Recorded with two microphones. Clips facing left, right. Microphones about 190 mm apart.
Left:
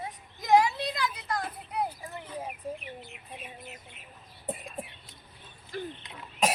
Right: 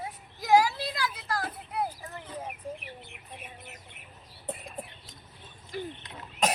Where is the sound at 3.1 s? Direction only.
55° right (ahead or behind).